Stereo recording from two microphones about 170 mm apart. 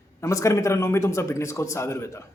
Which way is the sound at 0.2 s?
20° left (ahead or behind).